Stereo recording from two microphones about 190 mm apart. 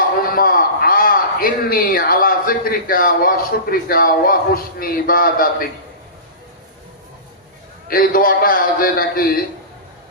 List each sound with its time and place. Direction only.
0.3 s a man's voice: 50° left (ahead or behind)
7.9 s a man's voice: 50° left (ahead or behind)